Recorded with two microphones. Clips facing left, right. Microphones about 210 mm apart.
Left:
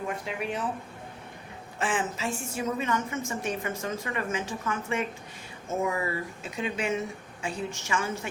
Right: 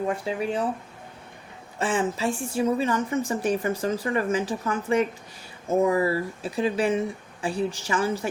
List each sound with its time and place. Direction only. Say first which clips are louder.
0.3 s a woman's voice: right 6 dB; 35° right (ahead or behind)
1.8 s a woman's voice: right 5 dB; 30° right (ahead or behind)